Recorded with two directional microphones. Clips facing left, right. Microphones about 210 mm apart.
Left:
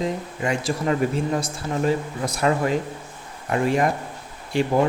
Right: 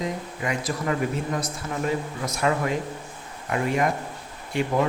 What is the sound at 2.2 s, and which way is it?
Speech, 35° left (ahead or behind).